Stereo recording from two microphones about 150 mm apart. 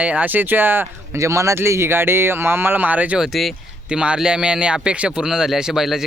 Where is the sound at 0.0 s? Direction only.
10° right (ahead or behind).